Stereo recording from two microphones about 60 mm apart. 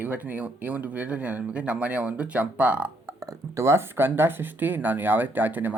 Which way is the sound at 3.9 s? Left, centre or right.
Right.